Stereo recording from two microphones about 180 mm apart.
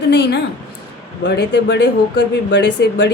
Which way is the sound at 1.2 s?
80° left.